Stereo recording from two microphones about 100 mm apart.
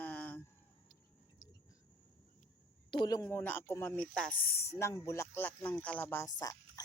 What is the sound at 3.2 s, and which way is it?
Speech, 20° left (ahead or behind).